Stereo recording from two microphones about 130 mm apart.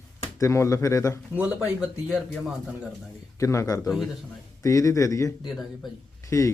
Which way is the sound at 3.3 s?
25° left (ahead or behind).